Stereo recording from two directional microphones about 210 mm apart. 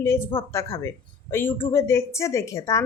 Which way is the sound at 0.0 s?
10° left (ahead or behind).